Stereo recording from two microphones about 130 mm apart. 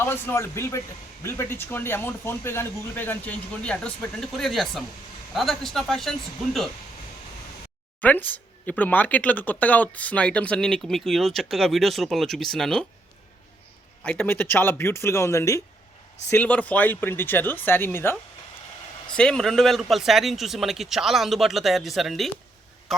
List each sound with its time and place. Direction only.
0.0 s a man's voice: 20° left (ahead or behind); by 6.7 s centre (ahead or behind)
8.0 s speech: 15° left (ahead or behind)
14.0 s speech: 15° left (ahead or behind)
16.3 s speech: 10° left (ahead or behind)
19.1 s a man's voice: 5° left (ahead or behind)